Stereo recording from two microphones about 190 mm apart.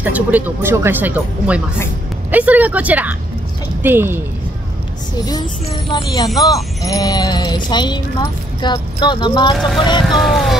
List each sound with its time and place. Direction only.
0.0 s speech: 10° right (ahead or behind)
5.9 s speech: 25° left (ahead or behind)
10.0 s speech: centre (ahead or behind)